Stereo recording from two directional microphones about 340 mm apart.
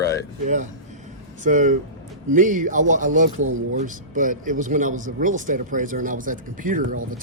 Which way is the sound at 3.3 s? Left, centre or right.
Right.